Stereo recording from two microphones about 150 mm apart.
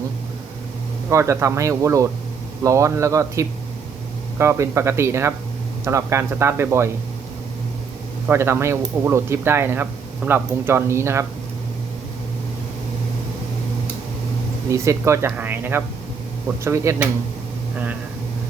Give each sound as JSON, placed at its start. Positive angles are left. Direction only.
{"t": 1.1, "sound": "speech", "side_deg": -20}
{"t": 8.3, "sound": "speech", "side_deg": -15}
{"t": 14.7, "sound": "speech", "side_deg": -20}